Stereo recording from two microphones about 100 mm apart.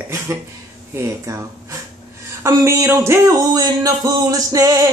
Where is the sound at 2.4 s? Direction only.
30° right (ahead or behind).